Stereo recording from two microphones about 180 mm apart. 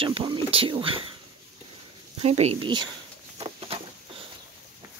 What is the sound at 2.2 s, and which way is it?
Speech, 35° right (ahead or behind).